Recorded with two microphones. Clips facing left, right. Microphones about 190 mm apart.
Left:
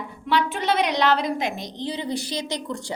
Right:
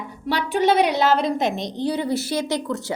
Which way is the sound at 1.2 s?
20° right (ahead or behind).